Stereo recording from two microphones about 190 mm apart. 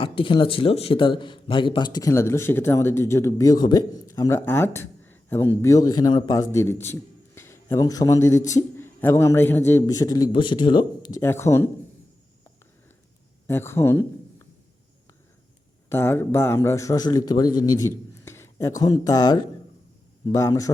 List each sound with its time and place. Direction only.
0.0 s speech: 25° left (ahead or behind)
11.2 s speech: 15° left (ahead or behind)
13.5 s speech: 10° left (ahead or behind)
15.9 s speech: 10° left (ahead or behind)